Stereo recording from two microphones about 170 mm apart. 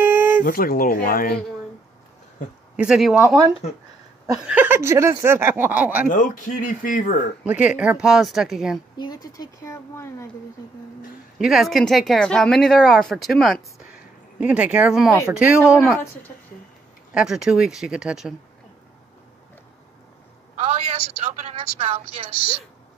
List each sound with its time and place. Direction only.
0.0 s a sound: 10° right (ahead or behind)
0.4 s speech: 55° left (ahead or behind)
2.7 s speech: 5° right (ahead or behind)
4.4 s speech: 10° right (ahead or behind)
6.0 s speech: 50° left (ahead or behind)
7.4 s speech: 10° right (ahead or behind)
8.9 s a woman's voice: 25° left (ahead or behind)
11.3 s speech: centre (ahead or behind)
17.1 s speech: 5° right (ahead or behind)
20.5 s a woman's voice: 40° right (ahead or behind)